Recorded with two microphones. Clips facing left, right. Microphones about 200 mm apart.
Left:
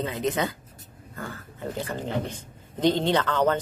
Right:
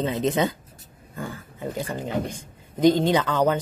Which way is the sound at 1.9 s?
10° right (ahead or behind).